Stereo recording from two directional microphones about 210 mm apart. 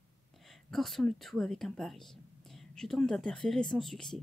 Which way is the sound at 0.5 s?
Centre (ahead or behind).